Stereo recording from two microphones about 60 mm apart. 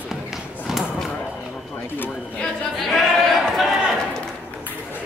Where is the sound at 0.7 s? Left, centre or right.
Centre.